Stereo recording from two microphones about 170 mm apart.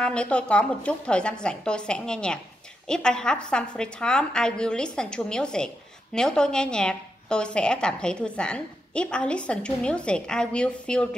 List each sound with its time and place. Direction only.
0.0 s a woman's voice: 5° left (ahead or behind)